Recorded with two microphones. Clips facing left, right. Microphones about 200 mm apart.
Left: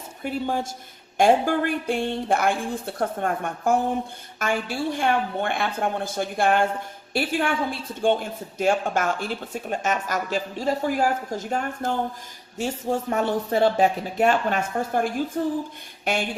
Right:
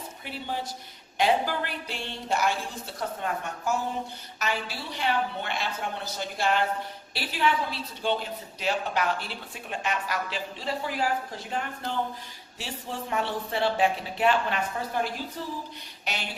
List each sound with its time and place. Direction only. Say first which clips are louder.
0.2 s a man's voice: left 9 dB; 45° left (ahead or behind)